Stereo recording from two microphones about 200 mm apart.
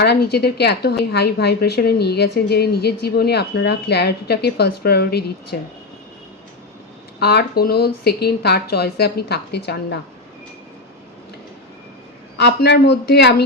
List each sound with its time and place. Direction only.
0.0 s a woman's voice: 55° left (ahead or behind)
7.2 s a woman's voice: 55° left (ahead or behind)
12.4 s a man's voice: 55° left (ahead or behind)